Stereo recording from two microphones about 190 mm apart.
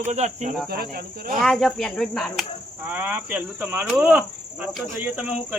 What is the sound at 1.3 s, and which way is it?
Speech, centre (ahead or behind).